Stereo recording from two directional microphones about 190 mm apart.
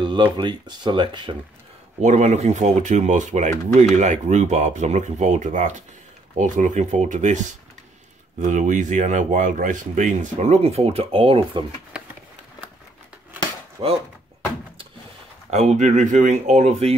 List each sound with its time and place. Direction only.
0.0 s speech: 25° right (ahead or behind)
2.0 s speech: 40° right (ahead or behind)
8.4 s speech: 40° right (ahead or behind)
15.5 s speech: 35° right (ahead or behind)